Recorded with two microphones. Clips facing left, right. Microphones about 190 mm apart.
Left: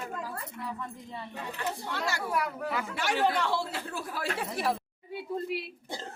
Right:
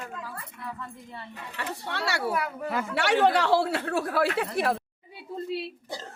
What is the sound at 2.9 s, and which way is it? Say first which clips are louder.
Speech: right 7 dB; 70° right (ahead or behind).